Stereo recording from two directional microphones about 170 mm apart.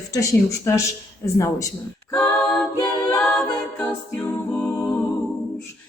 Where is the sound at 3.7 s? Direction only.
5° left (ahead or behind).